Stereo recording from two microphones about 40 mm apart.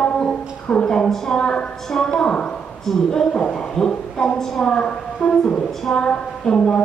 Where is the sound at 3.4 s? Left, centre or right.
Left.